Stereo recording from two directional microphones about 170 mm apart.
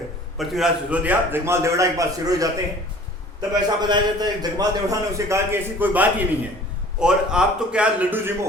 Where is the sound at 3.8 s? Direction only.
25° right (ahead or behind); by 8.2 s 5° right (ahead or behind).